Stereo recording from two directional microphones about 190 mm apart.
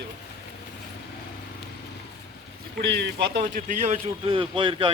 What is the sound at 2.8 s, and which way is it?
Speech, 65° right (ahead or behind).